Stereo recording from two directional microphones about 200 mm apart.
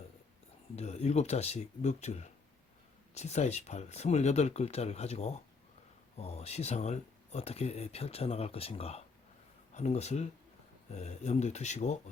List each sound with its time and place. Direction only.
0.8 s speech: 35° left (ahead or behind)